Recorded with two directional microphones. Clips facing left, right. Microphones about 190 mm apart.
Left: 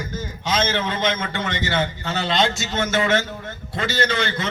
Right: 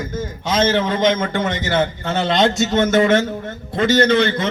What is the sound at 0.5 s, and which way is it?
A man's voice, 45° right (ahead or behind).